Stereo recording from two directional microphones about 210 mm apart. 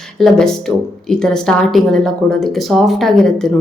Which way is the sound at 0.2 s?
Centre (ahead or behind).